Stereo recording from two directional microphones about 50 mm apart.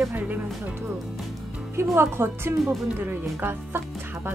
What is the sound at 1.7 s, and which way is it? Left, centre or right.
Speech, right.